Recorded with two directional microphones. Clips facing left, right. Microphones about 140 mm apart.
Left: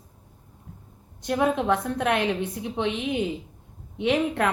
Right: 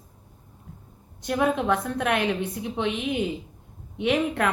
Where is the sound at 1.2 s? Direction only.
25° left (ahead or behind).